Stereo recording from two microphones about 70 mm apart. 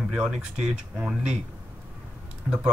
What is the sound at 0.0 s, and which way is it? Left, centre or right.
Speech, centre.